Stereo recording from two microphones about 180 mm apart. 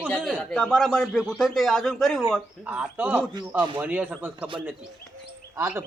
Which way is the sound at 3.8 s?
10° right (ahead or behind).